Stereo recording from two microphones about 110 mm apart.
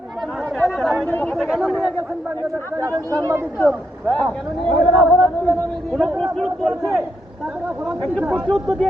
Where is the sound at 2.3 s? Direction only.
25° right (ahead or behind).